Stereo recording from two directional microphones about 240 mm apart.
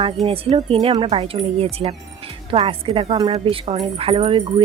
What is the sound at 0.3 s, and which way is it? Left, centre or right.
Speech, right.